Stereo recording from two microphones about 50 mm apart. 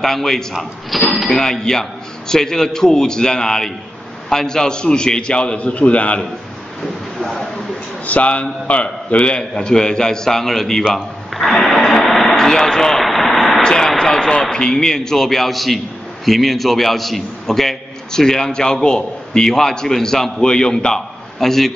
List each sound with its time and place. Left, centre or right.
0.0 s a man's voice: centre; by 6.2 s left
6.8 s a sound: centre
8.1 s a man's voice: left; by 10.8 s centre
11.6 s a sound: centre
13.0 s vehicle: centre
13.6 s a man's voice: centre